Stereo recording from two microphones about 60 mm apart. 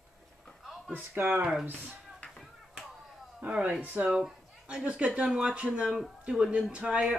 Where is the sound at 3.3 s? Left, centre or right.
Centre.